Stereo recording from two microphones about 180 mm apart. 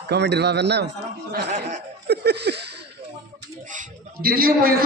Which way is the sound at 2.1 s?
65° right (ahead or behind).